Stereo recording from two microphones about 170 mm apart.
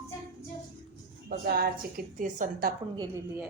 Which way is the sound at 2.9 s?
20° right (ahead or behind).